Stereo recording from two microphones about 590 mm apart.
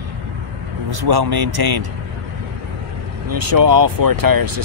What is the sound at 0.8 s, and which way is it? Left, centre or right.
Speech, right.